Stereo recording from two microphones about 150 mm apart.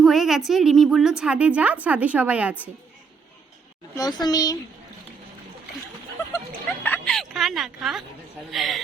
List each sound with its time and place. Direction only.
0.0 s a woman's voice: centre (ahead or behind)
3.9 s a woman's voice: 25° left (ahead or behind)
6.8 s music: 10° left (ahead or behind)
8.4 s a man's voice: centre (ahead or behind)